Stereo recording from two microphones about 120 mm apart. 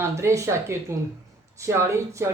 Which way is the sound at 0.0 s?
25° right (ahead or behind).